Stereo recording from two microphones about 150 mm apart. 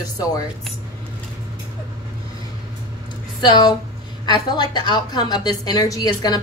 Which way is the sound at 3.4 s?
30° left (ahead or behind).